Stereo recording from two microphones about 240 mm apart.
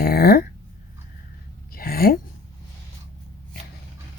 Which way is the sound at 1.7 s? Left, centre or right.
Left.